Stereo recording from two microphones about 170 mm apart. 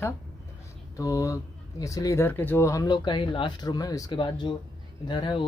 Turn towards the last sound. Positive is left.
turn(degrees=25)  # may be behind; listen again after turning